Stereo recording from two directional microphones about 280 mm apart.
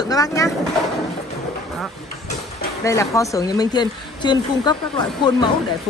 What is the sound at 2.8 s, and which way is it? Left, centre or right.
Speech, centre.